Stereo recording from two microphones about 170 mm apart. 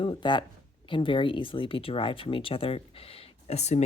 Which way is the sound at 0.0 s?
30° left (ahead or behind).